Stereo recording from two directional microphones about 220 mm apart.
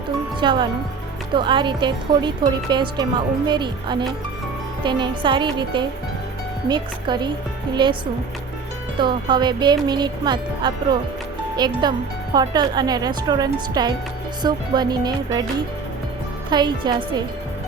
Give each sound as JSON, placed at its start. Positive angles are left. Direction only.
{"t": 0.3, "sound": "speech", "side_deg": -20}
{"t": 9.0, "sound": "speech", "side_deg": -20}
{"t": 16.5, "sound": "speech", "side_deg": -20}